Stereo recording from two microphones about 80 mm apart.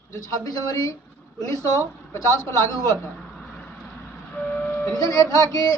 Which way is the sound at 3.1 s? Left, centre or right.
Centre.